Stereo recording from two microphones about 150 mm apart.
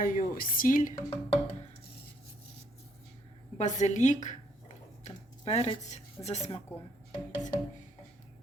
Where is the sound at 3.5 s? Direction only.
55° left (ahead or behind).